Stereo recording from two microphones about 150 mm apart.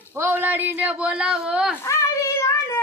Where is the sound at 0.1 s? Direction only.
15° right (ahead or behind).